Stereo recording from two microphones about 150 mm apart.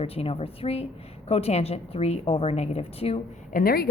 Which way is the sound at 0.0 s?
40° left (ahead or behind).